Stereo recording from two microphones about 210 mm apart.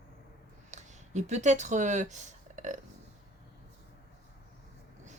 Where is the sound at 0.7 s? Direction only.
35° right (ahead or behind).